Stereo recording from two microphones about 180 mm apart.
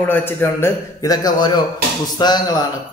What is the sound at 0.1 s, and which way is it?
Speech, 10° left (ahead or behind).